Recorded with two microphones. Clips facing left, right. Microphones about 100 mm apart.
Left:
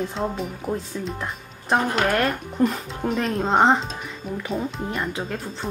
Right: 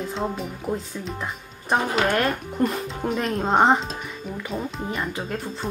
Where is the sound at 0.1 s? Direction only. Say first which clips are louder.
Left 1 dB; centre (ahead or behind).